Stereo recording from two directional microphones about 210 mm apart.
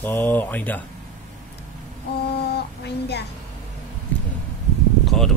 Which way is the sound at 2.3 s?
50° left (ahead or behind).